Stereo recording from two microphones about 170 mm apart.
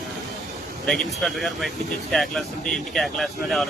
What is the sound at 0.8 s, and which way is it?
Speech, centre (ahead or behind).